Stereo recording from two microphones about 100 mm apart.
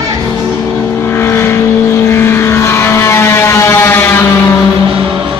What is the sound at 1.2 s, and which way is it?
Vehicle, 25° left (ahead or behind).